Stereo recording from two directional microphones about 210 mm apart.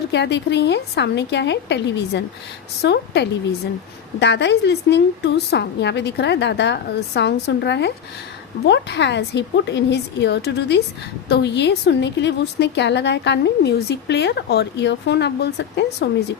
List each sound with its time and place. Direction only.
0.1 s a woman's voice: 55° left (ahead or behind)